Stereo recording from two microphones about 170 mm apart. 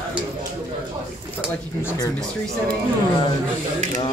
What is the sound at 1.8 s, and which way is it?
Speech, 15° left (ahead or behind).